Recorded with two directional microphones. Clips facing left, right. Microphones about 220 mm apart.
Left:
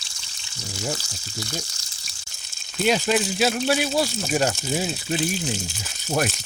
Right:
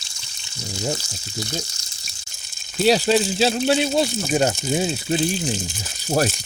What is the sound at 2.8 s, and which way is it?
Speech, 35° right (ahead or behind).